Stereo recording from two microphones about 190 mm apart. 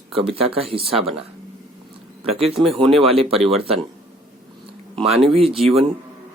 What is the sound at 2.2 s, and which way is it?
Speech, 30° right (ahead or behind).